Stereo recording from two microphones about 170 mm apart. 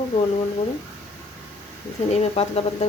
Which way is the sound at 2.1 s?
40° left (ahead or behind).